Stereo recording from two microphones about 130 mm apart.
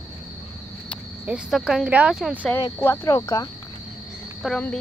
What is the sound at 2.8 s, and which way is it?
Speech, 25° left (ahead or behind).